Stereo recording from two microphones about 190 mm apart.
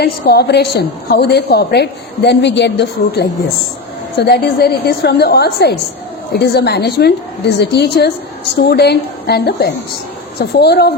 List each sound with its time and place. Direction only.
0.0 s a woman's voice: 55° left (ahead or behind)